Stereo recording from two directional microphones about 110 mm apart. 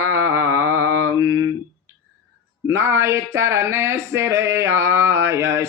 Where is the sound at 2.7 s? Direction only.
25° right (ahead or behind).